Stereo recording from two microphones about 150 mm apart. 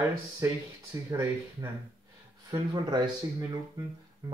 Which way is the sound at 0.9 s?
20° right (ahead or behind).